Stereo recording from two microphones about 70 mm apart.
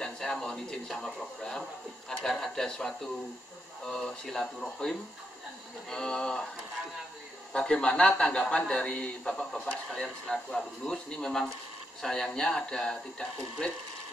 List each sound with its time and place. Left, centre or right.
0.0 s a man's voice: centre
7.5 s speech: centre